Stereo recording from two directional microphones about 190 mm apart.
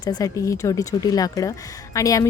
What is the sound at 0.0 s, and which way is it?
Speech, 20° left (ahead or behind).